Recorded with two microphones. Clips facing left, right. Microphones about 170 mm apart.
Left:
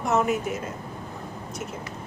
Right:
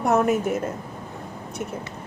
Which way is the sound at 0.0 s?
55° right (ahead or behind).